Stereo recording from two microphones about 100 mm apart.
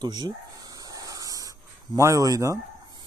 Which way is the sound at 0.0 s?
45° right (ahead or behind).